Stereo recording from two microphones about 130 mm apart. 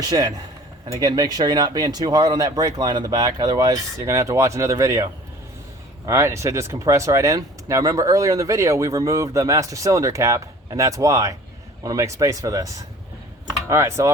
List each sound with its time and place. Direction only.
0.0 s speech: 30° right (ahead or behind)
6.1 s speech: 25° right (ahead or behind)